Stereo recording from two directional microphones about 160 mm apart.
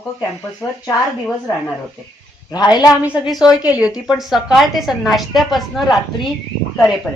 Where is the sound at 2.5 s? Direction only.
25° left (ahead or behind).